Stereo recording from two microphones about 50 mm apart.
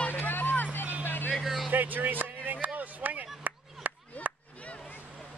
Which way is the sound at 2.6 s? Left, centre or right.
Right.